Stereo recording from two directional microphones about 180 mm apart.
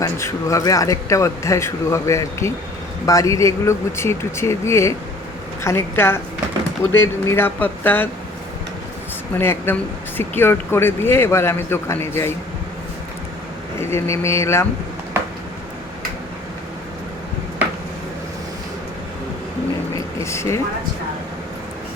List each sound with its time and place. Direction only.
0.0 s speech: 15° left (ahead or behind)
9.4 s speech: 10° left (ahead or behind)
13.7 s speech: 15° left (ahead or behind)
20.1 s speech: 15° left (ahead or behind)